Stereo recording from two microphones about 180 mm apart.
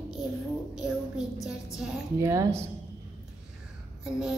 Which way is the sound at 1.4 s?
5° right (ahead or behind).